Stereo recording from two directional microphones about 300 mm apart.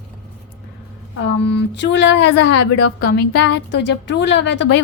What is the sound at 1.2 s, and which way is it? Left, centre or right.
A woman's voice, left.